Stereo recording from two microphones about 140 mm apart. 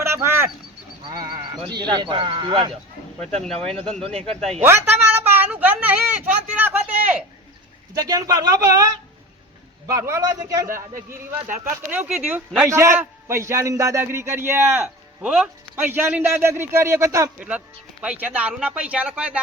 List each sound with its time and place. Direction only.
0.0 s a sound: 20° right (ahead or behind)
1.0 s sheep: 30° right (ahead or behind)
1.7 s speech: 30° right (ahead or behind)
3.4 s speech: 5° left (ahead or behind)
4.6 s a sound: 15° right (ahead or behind)
7.9 s a man's voice: 25° right (ahead or behind)
15.2 s speech: 5° right (ahead or behind); by 17.3 s 25° right (ahead or behind)
18.0 s speech: 10° right (ahead or behind)